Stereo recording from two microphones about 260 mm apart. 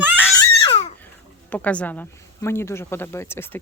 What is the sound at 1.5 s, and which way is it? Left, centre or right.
Speech, centre.